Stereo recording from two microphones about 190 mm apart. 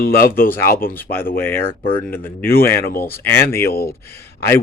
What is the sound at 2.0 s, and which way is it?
Speech, 10° left (ahead or behind).